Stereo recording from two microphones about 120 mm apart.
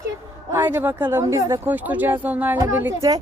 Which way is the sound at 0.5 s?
15° right (ahead or behind).